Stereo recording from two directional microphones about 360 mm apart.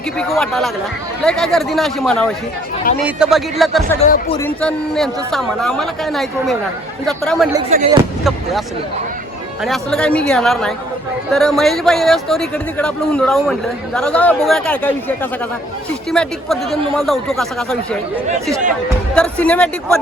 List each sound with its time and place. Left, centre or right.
0.2 s speech: centre
4.0 s speech: centre
4.4 s speech: centre
9.6 s speech: centre
19.1 s speech: centre